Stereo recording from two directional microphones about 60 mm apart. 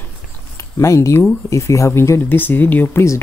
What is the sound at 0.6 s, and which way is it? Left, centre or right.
Speech, left.